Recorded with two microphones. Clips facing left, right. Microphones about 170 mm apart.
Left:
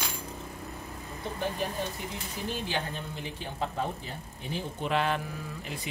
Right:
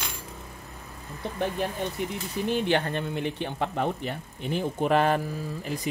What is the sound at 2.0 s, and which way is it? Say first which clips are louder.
Speech: right 7 dB; 60° right (ahead or behind).